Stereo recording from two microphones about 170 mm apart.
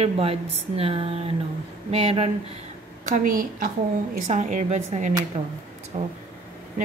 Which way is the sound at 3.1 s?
50° right (ahead or behind).